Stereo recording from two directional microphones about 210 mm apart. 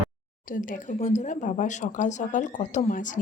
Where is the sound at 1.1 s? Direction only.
35° left (ahead or behind).